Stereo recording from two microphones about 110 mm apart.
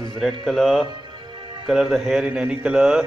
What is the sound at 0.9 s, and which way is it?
Music, 45° right (ahead or behind).